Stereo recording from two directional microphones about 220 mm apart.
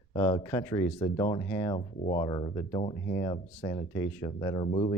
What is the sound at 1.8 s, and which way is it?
Speech, 25° left (ahead or behind).